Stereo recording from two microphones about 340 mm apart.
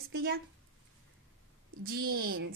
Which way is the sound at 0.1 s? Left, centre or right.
Right.